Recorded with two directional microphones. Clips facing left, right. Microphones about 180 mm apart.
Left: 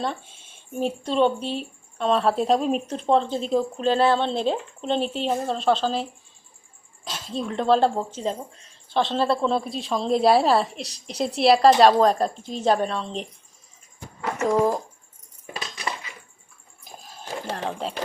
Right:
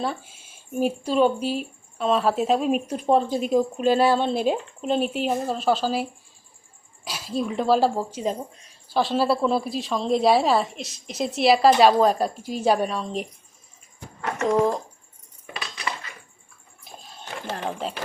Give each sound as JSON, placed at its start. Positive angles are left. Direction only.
{"t": 0.0, "sound": "speech", "side_deg": -5}
{"t": 14.4, "sound": "speech", "side_deg": 5}
{"t": 16.8, "sound": "a sound", "side_deg": 0}
{"t": 17.7, "sound": "speech", "side_deg": 0}